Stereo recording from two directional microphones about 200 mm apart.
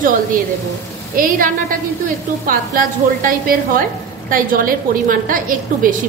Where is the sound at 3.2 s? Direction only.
45° right (ahead or behind).